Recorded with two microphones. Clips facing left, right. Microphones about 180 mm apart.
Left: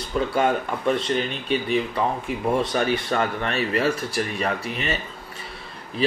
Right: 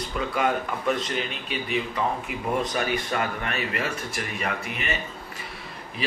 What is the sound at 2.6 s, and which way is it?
A man's voice, 30° left (ahead or behind).